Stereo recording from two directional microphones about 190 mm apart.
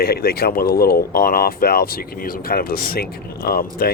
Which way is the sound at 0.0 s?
55° left (ahead or behind).